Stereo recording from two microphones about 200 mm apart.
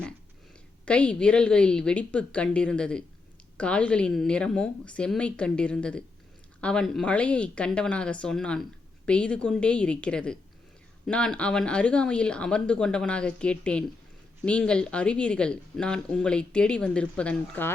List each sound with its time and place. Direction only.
0.9 s speech: 5° left (ahead or behind)